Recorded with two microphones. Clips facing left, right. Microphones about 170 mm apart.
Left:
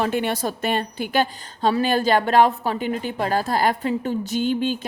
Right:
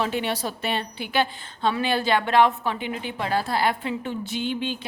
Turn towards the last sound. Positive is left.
turn(degrees=45)  # may be behind; listen again after turning